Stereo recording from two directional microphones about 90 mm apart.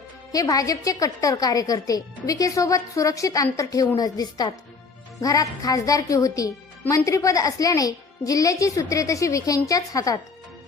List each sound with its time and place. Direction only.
0.3 s speech: 40° left (ahead or behind)